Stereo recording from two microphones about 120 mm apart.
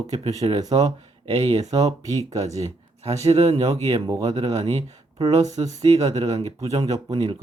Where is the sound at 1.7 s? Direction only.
30° right (ahead or behind).